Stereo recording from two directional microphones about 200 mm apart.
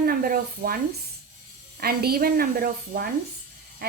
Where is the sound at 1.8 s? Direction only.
50° right (ahead or behind).